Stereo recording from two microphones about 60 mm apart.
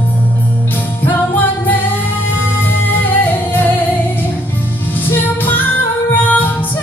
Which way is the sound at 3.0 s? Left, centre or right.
Left.